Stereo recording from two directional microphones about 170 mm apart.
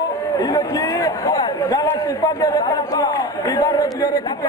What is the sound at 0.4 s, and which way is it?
A man's voice, 20° left (ahead or behind).